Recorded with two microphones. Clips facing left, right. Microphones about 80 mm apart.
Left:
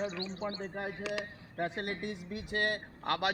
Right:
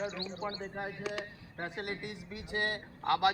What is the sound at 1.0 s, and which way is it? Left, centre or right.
Speech, centre.